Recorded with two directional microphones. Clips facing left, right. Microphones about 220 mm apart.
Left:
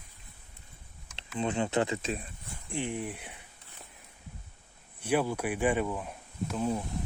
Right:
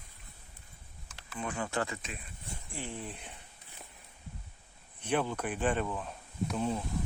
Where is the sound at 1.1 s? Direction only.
25° left (ahead or behind).